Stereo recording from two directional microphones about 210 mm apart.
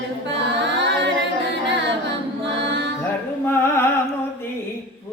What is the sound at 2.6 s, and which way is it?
Music, 55° right (ahead or behind).